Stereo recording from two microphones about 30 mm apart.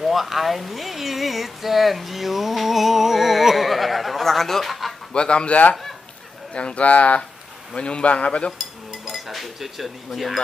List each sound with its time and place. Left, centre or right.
0.0 s speech: centre
4.6 s a sound: centre
5.1 s a man's voice: left
7.7 s a man's voice: left
8.5 s speech: centre